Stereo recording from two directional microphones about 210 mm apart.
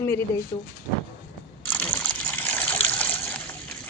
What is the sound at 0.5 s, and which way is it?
Speech, 25° left (ahead or behind).